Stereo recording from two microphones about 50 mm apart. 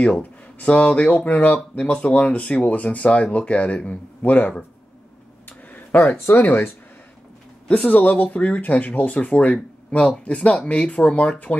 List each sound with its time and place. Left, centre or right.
0.0 s speech: left
5.7 s a sound: left
6.0 s speech: left
7.6 s speech: left